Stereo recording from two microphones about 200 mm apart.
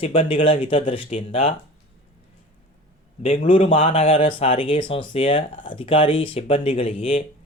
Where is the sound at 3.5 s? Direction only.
30° left (ahead or behind).